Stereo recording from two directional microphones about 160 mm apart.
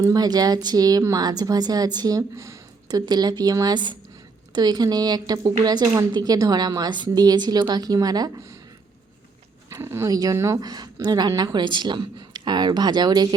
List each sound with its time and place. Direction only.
0.0 s speech: 25° right (ahead or behind)
9.6 s speech: 15° right (ahead or behind)